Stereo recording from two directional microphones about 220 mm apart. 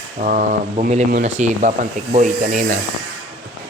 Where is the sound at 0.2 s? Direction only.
35° right (ahead or behind).